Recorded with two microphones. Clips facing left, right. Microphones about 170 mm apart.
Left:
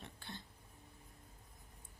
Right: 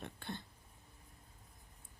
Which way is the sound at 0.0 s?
55° right (ahead or behind).